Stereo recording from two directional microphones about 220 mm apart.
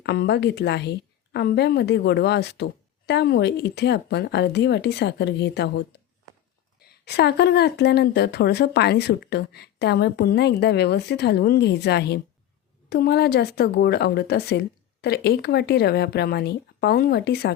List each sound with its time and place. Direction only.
0.0 s speech: 50° left (ahead or behind)
6.8 s speech: 50° left (ahead or behind)